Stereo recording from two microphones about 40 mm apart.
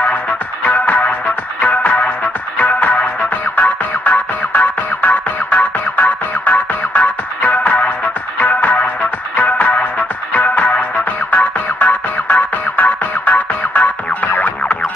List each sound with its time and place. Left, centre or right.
0.7 s music: left
10.3 s music: left